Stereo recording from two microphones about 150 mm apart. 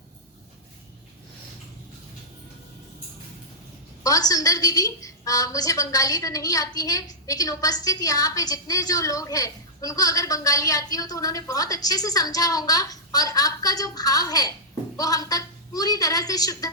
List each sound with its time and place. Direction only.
4.0 s a woman's voice: 25° left (ahead or behind)